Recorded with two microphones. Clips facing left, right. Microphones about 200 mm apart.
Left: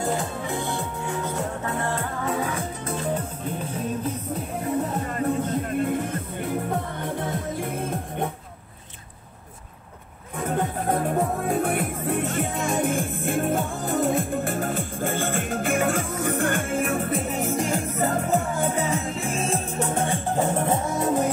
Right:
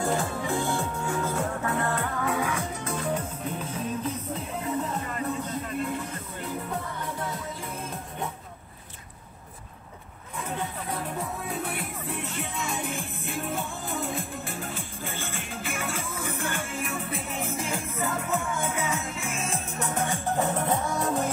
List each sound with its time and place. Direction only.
0.0 s music: 20° left (ahead or behind)
5.0 s music: 45° left (ahead or behind)
10.3 s music: 50° left (ahead or behind); by 21.3 s 20° left (ahead or behind)